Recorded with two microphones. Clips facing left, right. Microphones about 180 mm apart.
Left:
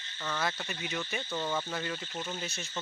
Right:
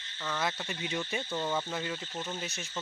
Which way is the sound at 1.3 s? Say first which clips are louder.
Even; 10° right (ahead or behind).